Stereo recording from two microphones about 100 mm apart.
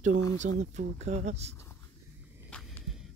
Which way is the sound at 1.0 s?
90° right.